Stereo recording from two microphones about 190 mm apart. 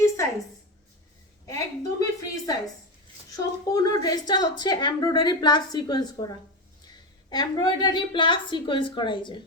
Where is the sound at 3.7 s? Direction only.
20° left (ahead or behind).